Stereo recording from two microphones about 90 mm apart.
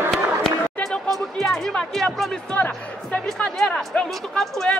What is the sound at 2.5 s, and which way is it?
A man's voice, 15° left (ahead or behind).